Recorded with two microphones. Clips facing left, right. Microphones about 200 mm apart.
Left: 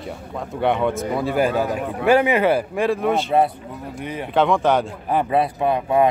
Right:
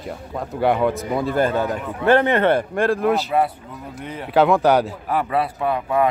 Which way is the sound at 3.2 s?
25° left (ahead or behind).